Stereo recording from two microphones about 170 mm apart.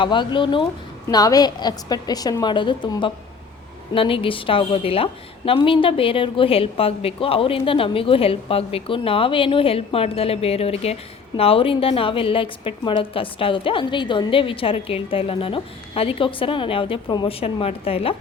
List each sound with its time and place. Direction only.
0.0 s a woman's voice: 30° left (ahead or behind)